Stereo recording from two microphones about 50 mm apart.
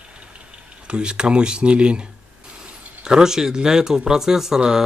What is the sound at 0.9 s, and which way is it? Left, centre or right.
Speech, centre.